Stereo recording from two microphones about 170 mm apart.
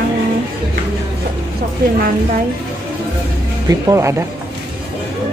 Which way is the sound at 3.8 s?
15° right (ahead or behind).